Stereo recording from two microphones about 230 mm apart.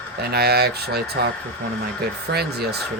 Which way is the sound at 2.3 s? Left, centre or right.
Right.